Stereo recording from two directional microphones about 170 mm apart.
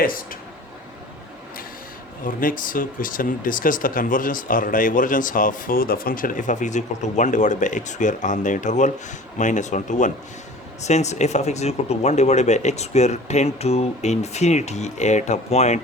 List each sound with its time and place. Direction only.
2.2 s speech: 55° left (ahead or behind)